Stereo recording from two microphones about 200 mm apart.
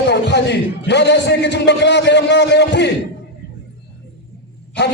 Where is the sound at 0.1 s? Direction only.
60° left (ahead or behind).